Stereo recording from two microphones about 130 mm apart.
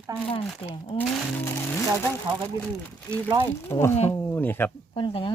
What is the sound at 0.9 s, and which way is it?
Speech, 45° left (ahead or behind).